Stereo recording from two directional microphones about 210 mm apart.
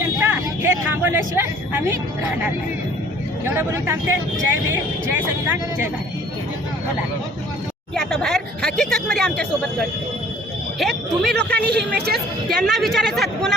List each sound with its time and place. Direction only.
0.2 s vehicle: 10° right (ahead or behind)
3.4 s speech: 10° right (ahead or behind)
7.9 s speech: centre (ahead or behind)
11.5 s speech: 50° right (ahead or behind)
12.5 s speech: centre (ahead or behind)